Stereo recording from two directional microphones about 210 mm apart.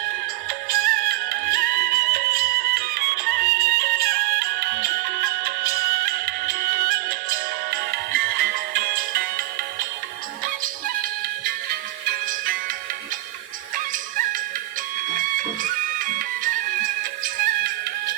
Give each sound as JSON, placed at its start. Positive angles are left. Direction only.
{"t": 0.4, "sound": "music", "side_deg": -45}
{"t": 10.6, "sound": "music", "side_deg": -45}
{"t": 13.7, "sound": "music", "side_deg": -40}